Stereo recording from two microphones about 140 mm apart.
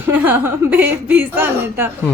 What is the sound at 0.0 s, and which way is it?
A woman's voice, 15° right (ahead or behind).